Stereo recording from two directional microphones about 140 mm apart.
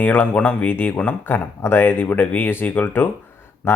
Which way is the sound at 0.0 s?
10° left (ahead or behind).